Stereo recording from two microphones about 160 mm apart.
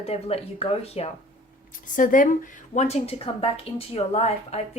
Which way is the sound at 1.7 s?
55° left (ahead or behind).